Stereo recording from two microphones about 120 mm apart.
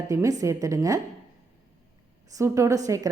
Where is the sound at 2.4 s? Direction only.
25° right (ahead or behind).